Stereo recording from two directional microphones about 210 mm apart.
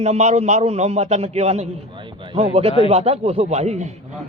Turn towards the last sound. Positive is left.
turn(degrees=-30)  # may be behind; listen again after turning